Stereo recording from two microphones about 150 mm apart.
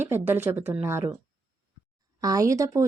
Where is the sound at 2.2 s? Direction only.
25° right (ahead or behind).